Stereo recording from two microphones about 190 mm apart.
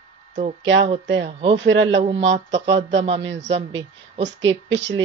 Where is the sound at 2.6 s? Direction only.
70° right (ahead or behind).